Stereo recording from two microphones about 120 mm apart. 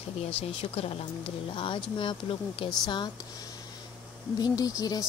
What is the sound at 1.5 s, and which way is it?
Speech, 45° left (ahead or behind).